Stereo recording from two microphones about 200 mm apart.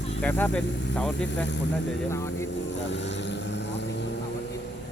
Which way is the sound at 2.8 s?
60° left (ahead or behind).